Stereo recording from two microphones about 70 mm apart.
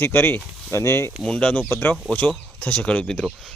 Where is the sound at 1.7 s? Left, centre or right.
Left; by 3.3 s centre.